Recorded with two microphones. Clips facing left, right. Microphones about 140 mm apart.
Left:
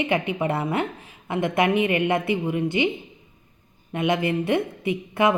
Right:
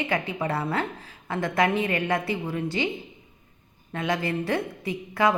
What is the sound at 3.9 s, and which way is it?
A woman's voice, 20° left (ahead or behind).